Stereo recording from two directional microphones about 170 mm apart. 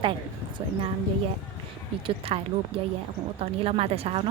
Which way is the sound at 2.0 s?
30° right (ahead or behind).